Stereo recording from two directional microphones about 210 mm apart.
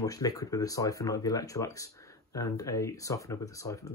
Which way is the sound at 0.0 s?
15° left (ahead or behind).